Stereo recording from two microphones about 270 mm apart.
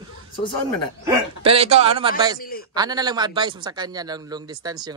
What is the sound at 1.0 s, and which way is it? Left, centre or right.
A man's voice, right.